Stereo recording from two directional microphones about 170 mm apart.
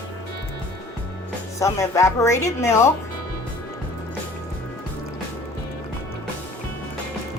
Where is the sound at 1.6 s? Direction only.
20° left (ahead or behind).